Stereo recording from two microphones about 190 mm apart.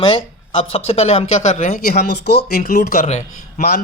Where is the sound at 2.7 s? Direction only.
55° left (ahead or behind).